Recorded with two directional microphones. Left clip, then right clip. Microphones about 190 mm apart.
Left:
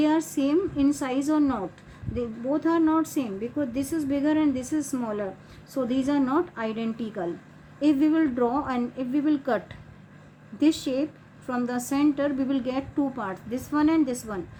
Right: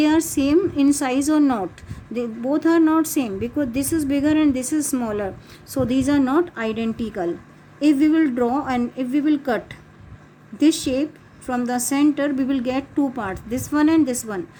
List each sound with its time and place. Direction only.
0.0 s a woman's voice: 55° right (ahead or behind)